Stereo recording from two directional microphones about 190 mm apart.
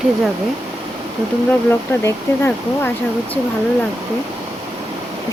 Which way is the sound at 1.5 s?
10° left (ahead or behind).